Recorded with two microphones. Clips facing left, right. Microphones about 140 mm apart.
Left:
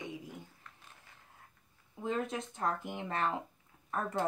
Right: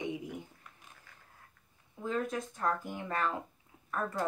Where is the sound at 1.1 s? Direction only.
25° left (ahead or behind).